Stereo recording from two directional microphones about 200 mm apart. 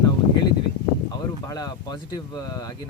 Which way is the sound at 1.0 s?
20° left (ahead or behind).